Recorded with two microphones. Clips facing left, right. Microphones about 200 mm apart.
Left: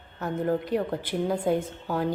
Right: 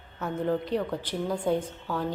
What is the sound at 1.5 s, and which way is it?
Speech, 5° left (ahead or behind).